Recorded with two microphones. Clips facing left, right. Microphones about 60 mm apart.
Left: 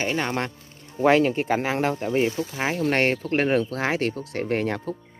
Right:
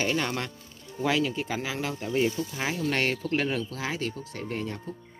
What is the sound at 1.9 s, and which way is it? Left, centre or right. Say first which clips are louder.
Speech: left 4 dB; left.